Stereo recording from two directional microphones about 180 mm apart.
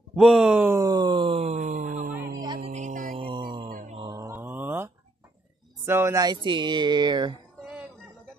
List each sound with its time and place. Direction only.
0.1 s a sound: 5° right (ahead or behind); by 2.0 s 45° right (ahead or behind)
2.1 s music: 20° right (ahead or behind)
2.7 s music: 45° right (ahead or behind); by 3.6 s 25° right (ahead or behind)
3.6 s mantra: 45° right (ahead or behind)
4.0 s mantra: 20° right (ahead or behind)
5.9 s speech: 15° right (ahead or behind)
7.6 s music: 5° right (ahead or behind)